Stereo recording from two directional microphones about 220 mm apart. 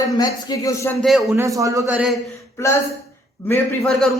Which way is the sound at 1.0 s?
Centre (ahead or behind).